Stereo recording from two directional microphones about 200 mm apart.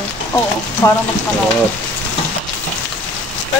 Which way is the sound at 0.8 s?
15° left (ahead or behind).